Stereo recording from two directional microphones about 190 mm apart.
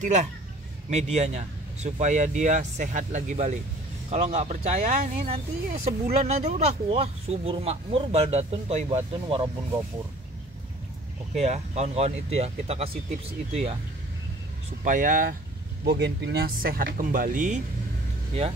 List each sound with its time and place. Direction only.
0.0 s speech: 40° right (ahead or behind)
11.3 s speech: 35° right (ahead or behind)
14.8 s speech: 45° right (ahead or behind)
15.8 s speech: 60° right (ahead or behind); by 17.6 s 45° right (ahead or behind)